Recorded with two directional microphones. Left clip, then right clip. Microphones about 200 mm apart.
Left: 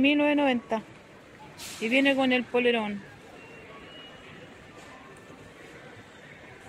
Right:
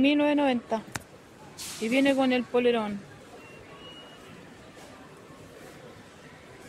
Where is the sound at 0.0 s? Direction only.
Centre (ahead or behind).